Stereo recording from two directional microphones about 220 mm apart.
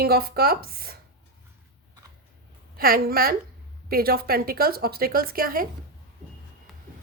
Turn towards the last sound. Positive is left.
turn(degrees=-40)  # may be behind; listen again after turning